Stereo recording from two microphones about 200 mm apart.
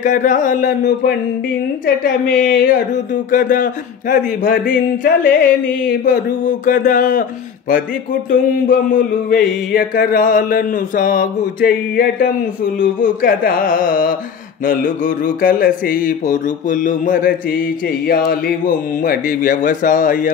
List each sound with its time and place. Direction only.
0.0 s speech: 40° left (ahead or behind)
1.9 s mantra: 45° left (ahead or behind)
3.3 s speech: 40° left (ahead or behind)
4.1 s mantra: 45° left (ahead or behind)
8.3 s mantra: 45° left (ahead or behind)